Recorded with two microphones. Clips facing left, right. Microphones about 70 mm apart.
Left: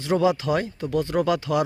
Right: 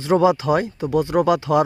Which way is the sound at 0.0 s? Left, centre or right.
Right.